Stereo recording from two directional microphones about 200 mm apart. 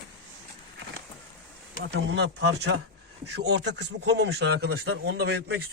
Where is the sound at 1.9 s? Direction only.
60° right (ahead or behind).